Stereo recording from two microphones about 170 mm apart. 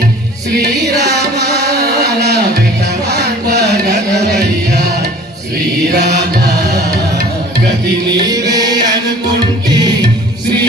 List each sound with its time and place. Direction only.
0.6 s carnatic music: 75° right (ahead or behind)
3.1 s music: 75° right (ahead or behind)
5.9 s mantra: 75° right (ahead or behind)
8.3 s music: 20° right (ahead or behind)